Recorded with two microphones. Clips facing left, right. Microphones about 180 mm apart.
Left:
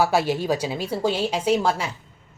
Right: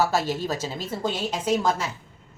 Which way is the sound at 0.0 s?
15° left (ahead or behind).